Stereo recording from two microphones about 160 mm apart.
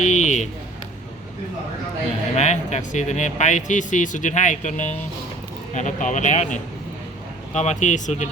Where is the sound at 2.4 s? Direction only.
45° left (ahead or behind).